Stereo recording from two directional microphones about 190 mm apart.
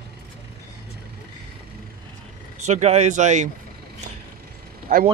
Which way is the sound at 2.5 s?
35° right (ahead or behind).